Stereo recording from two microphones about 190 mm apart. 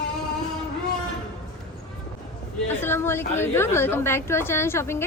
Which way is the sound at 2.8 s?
10° left (ahead or behind).